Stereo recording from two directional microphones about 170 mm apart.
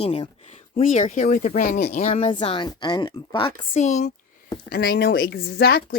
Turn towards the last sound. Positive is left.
turn(degrees=65)  # may be behind; listen again after turning